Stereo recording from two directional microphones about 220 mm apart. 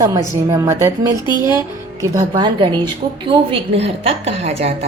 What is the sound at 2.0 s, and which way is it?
A woman's voice, 20° right (ahead or behind).